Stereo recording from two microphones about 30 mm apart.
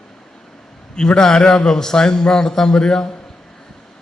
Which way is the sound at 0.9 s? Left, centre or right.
Left.